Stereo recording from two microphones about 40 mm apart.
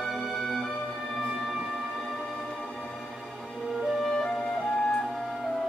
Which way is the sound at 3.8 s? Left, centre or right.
Centre.